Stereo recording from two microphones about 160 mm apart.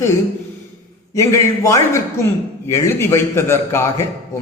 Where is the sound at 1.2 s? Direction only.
20° left (ahead or behind).